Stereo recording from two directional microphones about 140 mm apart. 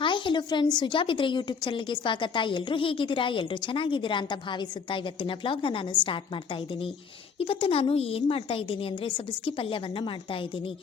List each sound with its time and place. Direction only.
0.0 s a sound: 35° left (ahead or behind)
0.8 s a woman's voice: 35° left (ahead or behind)
7.3 s a woman's voice: 40° left (ahead or behind)